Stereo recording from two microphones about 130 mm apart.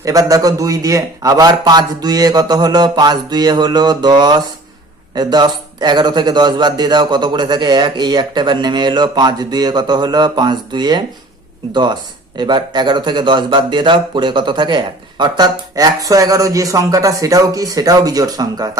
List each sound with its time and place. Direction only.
0.0 s a man's voice: 30° right (ahead or behind)